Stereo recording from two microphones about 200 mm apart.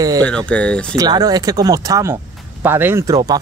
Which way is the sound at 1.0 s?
20° right (ahead or behind).